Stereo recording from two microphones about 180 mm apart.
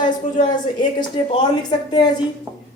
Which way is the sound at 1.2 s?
30° left (ahead or behind).